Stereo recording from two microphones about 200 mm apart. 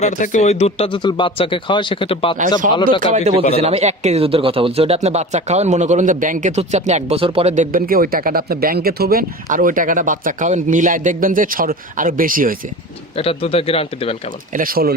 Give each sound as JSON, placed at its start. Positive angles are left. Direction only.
{"t": 0.0, "sound": "speech", "side_deg": 35}
{"t": 2.6, "sound": "speech", "side_deg": -40}
{"t": 13.1, "sound": "speech", "side_deg": 30}
{"t": 14.5, "sound": "speech", "side_deg": -45}